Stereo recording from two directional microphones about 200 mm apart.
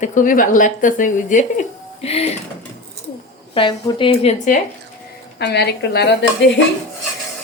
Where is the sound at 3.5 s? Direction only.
25° left (ahead or behind).